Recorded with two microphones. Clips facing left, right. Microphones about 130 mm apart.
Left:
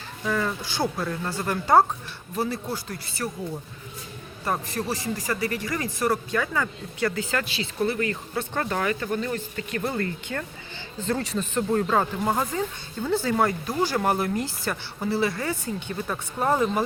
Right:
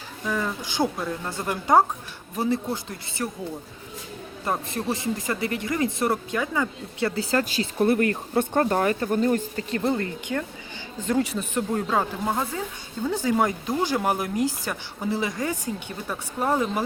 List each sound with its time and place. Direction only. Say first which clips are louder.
0.3 s speech: left 1 dB; 10° right (ahead or behind)
4.4 s speech: right 1 dB; 15° right (ahead or behind)
7.0 s speech: right 2 dB; 35° right (ahead or behind); by 12.0 s 10° right (ahead or behind)
12.2 s speech: left 2 dB; 5° left (ahead or behind)
13.1 s speech: even; 15° right (ahead or behind)